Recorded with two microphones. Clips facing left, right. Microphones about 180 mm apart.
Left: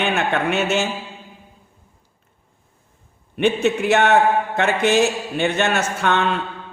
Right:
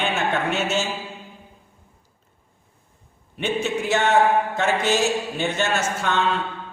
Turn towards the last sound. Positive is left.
turn(degrees=60)  # may be behind; listen again after turning